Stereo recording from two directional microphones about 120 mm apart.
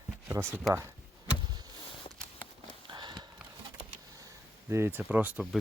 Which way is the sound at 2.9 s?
35° right (ahead or behind).